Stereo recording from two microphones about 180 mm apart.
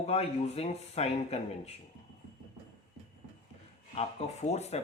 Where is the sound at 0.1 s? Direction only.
35° left (ahead or behind).